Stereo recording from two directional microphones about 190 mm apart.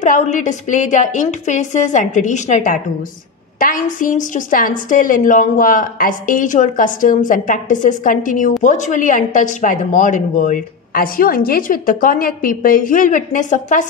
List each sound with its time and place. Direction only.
0.0 s a woman's voice: 40° left (ahead or behind)